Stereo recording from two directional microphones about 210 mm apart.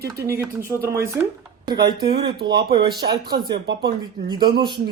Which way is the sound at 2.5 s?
50° right (ahead or behind).